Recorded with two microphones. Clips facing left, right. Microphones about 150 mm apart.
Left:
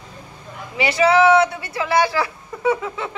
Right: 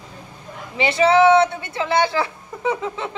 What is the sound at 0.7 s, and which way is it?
A woman's voice, 25° right (ahead or behind).